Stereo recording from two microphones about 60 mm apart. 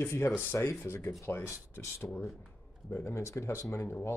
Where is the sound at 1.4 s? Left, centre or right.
Left.